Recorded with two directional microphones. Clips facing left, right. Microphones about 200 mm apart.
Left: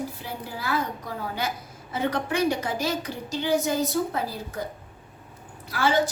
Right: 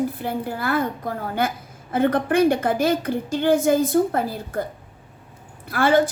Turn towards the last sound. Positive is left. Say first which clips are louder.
# right 5 dB
turn(degrees=-55)  # may be behind; listen again after turning